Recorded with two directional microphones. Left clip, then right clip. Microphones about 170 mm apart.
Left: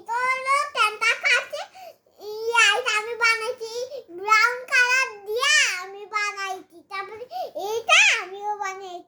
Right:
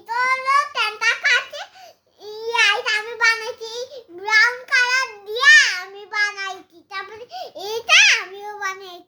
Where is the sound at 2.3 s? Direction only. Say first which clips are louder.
Right 1 dB; 5° right (ahead or behind); by 8.0 s 25° right (ahead or behind).